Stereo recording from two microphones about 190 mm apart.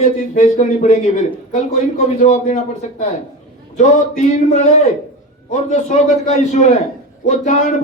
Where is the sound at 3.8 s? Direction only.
40° left (ahead or behind).